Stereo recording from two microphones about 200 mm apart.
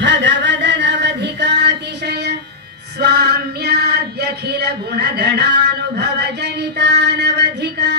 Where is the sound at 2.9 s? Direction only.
55° right (ahead or behind).